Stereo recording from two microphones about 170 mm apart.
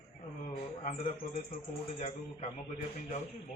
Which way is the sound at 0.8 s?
40° left (ahead or behind).